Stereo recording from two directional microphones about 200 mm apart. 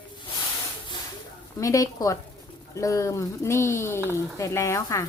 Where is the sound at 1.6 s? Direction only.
15° left (ahead or behind).